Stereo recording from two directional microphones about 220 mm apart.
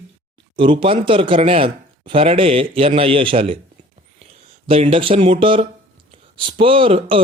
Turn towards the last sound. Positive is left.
turn(degrees=-25)  # may be behind; listen again after turning